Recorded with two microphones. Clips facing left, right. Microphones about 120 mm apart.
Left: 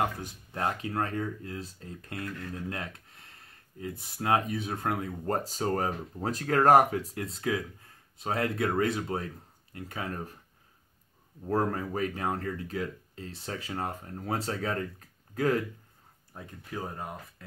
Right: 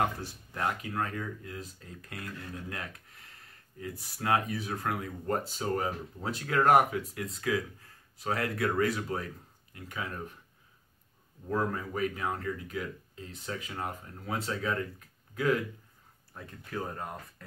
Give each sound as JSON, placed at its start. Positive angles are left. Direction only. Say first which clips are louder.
{"t": 0.6, "sound": "speech", "louder": "left 2 dB", "side_deg": 35}
{"t": 11.4, "sound": "speech", "louder": "left 3 dB", "side_deg": 40}
{"t": 16.3, "sound": "speech", "louder": "right 1 dB", "side_deg": 15}